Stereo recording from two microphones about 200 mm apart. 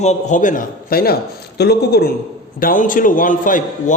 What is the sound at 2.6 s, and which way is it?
A man's voice, 45° left (ahead or behind).